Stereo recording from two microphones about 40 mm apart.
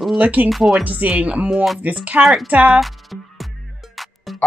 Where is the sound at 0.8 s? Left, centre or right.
Right.